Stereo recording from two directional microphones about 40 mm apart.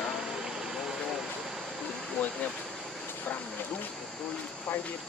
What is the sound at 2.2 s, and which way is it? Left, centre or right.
Vehicle, left.